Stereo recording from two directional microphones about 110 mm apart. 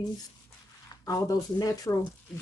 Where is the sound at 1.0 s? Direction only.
30° left (ahead or behind).